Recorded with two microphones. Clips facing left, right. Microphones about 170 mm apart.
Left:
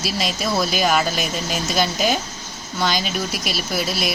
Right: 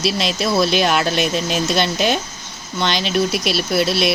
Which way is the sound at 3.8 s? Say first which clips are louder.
Right 7 dB; 65° right (ahead or behind).